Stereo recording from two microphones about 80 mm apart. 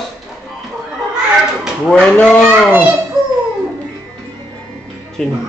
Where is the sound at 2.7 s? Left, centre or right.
Centre.